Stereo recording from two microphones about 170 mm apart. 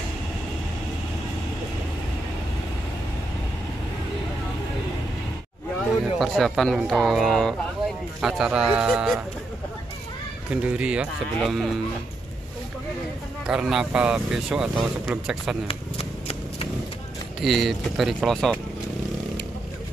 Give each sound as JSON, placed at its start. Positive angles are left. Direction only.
{"t": 6.1, "sound": "speech", "side_deg": 0}
{"t": 10.5, "sound": "speech", "side_deg": -10}
{"t": 13.5, "sound": "speech", "side_deg": -5}
{"t": 15.7, "sound": "shuffling cards", "side_deg": 35}
{"t": 17.4, "sound": "speech", "side_deg": 0}